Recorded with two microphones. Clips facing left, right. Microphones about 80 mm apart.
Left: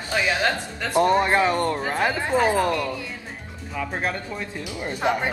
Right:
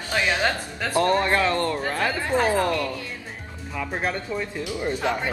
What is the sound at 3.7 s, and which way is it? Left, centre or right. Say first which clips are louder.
Speech: even; centre.